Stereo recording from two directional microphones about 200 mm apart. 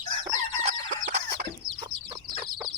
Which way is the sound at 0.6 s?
45° right (ahead or behind).